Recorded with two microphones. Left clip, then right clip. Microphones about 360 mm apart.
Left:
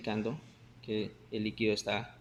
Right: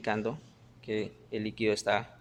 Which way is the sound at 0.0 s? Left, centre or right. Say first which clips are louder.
Right 4 dB; right.